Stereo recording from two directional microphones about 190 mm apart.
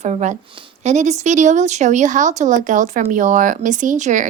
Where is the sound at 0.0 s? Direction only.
35° right (ahead or behind).